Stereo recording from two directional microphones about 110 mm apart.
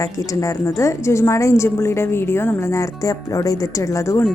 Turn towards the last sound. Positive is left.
turn(degrees=30)  # may be behind; listen again after turning